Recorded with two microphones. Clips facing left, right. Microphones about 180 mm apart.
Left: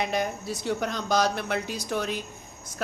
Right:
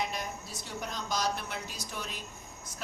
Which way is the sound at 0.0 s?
75° left (ahead or behind).